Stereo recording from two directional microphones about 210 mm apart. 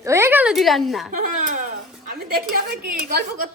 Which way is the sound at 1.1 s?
40° right (ahead or behind).